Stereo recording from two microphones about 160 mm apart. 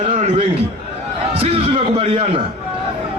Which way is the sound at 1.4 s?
40° right (ahead or behind).